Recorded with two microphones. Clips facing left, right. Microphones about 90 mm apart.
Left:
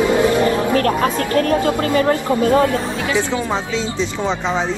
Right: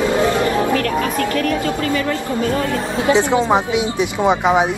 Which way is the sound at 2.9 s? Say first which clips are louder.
Right 5 dB; 25° right (ahead or behind).